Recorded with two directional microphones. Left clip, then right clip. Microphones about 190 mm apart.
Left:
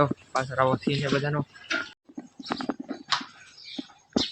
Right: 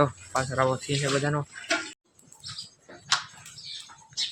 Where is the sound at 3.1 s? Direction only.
60° right (ahead or behind).